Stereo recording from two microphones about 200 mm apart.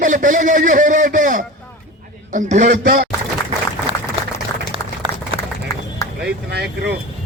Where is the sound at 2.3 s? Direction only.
40° right (ahead or behind).